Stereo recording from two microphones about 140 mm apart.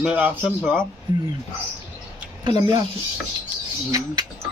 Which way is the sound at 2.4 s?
30° right (ahead or behind).